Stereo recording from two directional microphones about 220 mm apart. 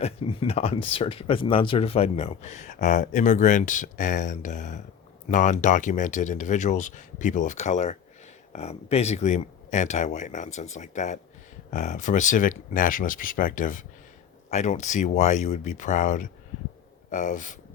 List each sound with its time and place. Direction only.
0.0 s speech: 25° left (ahead or behind)